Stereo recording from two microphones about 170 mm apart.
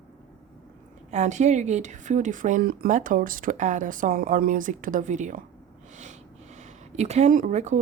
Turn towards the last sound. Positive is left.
turn(degrees=-45)  # may be behind; listen again after turning